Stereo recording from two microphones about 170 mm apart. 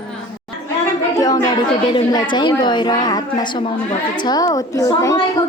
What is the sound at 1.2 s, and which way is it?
A woman's voice, 20° left (ahead or behind).